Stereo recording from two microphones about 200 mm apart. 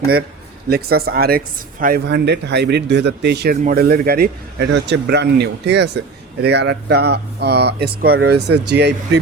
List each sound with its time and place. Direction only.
0.7 s a man's voice: 50° right (ahead or behind)